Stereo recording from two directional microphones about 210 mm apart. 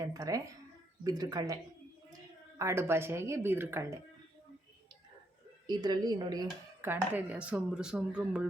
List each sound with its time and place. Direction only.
0.0 s speech: 15° right (ahead or behind)
2.6 s speech: 15° right (ahead or behind)
5.6 s speech: 20° right (ahead or behind)